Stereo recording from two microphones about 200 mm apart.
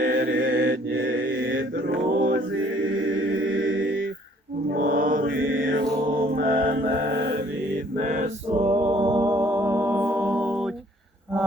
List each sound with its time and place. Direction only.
0.0 s mantra: 45° right (ahead or behind)
0.9 s mantra: 75° right (ahead or behind)
1.7 s mantra: 50° right (ahead or behind)
3.1 s music: 75° right (ahead or behind)
4.7 s mantra: 45° right (ahead or behind)
7.9 s a sound: 40° right (ahead or behind)
8.5 s music: 25° right (ahead or behind); by 10.7 s 5° right (ahead or behind)